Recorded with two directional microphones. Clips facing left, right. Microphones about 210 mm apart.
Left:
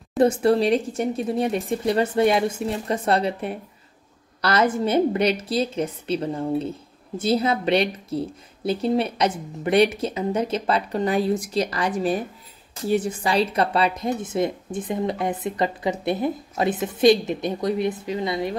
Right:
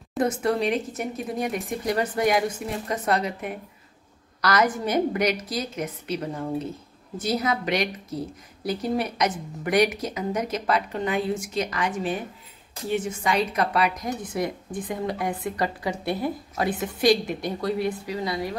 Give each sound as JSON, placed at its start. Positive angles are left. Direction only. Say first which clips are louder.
{"t": 0.2, "sound": "a woman's voice", "louder": "left 6 dB", "side_deg": 30}